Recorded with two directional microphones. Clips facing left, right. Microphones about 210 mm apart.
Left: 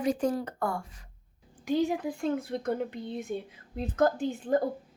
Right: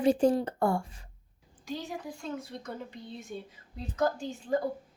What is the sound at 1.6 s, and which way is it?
A woman's voice, 55° left (ahead or behind).